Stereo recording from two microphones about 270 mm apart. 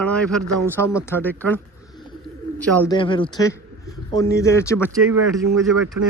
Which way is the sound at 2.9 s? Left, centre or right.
Centre.